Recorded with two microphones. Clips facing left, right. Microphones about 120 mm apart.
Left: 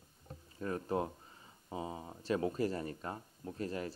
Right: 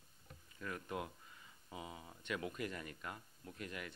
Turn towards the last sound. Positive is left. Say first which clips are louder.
# left 9 dB
turn(degrees=35)  # may be behind; listen again after turning